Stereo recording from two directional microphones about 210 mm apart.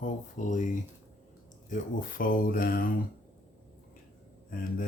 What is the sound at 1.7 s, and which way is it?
Speech, 40° left (ahead or behind).